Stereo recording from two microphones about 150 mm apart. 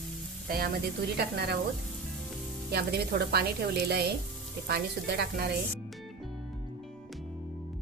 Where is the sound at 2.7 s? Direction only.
90° right.